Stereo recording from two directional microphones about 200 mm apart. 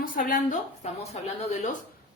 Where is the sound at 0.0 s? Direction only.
45° left (ahead or behind).